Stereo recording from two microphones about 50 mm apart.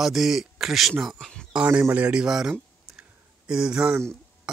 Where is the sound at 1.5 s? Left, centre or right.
Right.